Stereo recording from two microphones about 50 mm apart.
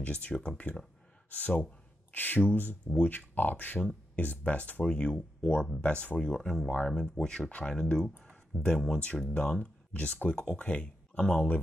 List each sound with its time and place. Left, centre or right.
0.0 s speech: left
6.4 s speech: centre